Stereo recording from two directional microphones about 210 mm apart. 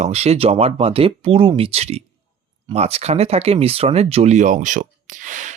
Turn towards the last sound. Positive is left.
turn(degrees=-35)  # may be behind; listen again after turning